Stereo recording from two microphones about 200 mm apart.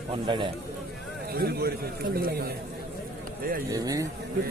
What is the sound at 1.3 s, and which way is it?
A man's voice, 50° right (ahead or behind).